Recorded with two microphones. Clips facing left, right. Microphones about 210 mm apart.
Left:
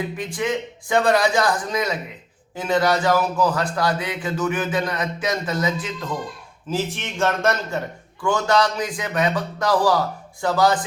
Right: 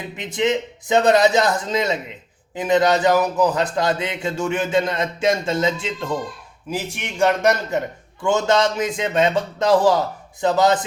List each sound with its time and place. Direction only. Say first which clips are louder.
0.2 s speech: right 8 dB; 20° right (ahead or behind)
6.7 s speech: left 2 dB; 15° right (ahead or behind)